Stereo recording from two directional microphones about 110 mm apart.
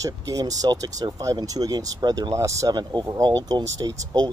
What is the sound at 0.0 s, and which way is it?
Speech, 35° right (ahead or behind).